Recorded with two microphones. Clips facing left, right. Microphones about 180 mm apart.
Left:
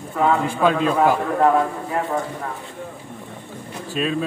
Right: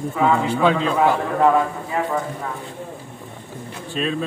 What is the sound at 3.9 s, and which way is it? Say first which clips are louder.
Speech: left 1 dB; 5° left (ahead or behind).